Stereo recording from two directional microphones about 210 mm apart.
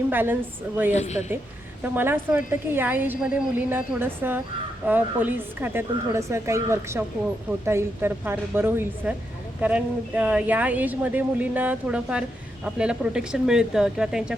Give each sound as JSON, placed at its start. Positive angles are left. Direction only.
{"t": 0.1, "sound": "speech", "side_deg": -10}
{"t": 0.9, "sound": "a woman's voice", "side_deg": 35}
{"t": 1.8, "sound": "speech", "side_deg": -10}